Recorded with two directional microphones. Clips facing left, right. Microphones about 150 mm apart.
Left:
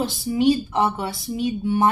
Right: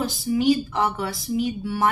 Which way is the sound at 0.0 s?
25° left (ahead or behind).